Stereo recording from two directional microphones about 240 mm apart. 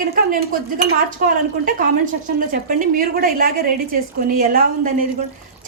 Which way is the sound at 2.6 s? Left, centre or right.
Right.